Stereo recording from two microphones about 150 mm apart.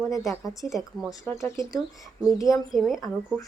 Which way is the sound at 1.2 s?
20° left (ahead or behind).